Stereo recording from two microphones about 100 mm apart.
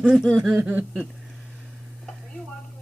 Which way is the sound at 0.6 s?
20° right (ahead or behind).